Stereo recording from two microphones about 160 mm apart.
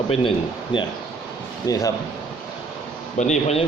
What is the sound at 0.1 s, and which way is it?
A man's voice, 30° left (ahead or behind).